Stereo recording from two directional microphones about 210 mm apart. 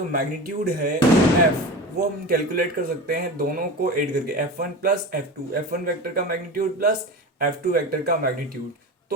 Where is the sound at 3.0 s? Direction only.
45° right (ahead or behind).